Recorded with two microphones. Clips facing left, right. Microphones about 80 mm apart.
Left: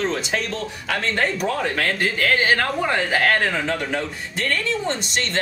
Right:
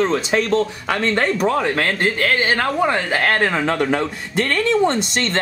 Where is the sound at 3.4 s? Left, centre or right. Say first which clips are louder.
Right 5 dB; right.